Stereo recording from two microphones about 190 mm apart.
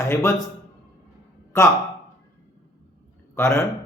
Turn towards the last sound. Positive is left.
turn(degrees=15)  # may be behind; listen again after turning